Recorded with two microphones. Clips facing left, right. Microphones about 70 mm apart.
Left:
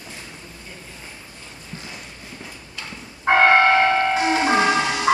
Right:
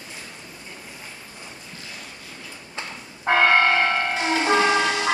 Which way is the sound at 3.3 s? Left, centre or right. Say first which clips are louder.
Left 3 dB; left.